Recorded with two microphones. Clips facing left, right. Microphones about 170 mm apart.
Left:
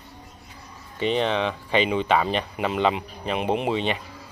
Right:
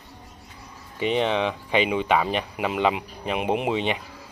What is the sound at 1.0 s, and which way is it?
Speech, 15° right (ahead or behind).